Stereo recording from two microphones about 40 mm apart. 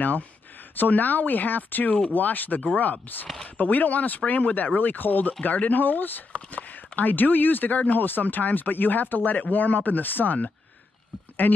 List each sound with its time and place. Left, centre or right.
0.7 s speech: left